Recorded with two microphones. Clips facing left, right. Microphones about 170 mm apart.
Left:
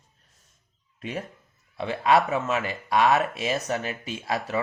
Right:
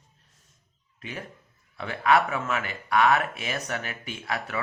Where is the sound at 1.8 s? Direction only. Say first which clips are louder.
Left 1 dB; 25° left (ahead or behind).